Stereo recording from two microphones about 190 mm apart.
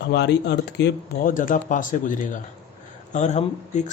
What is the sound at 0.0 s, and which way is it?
Speech, 65° left (ahead or behind).